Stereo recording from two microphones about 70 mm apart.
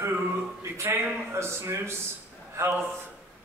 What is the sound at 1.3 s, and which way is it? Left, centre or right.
A man's voice, right.